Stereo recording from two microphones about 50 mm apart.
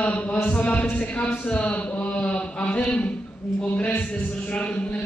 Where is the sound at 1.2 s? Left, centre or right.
Left.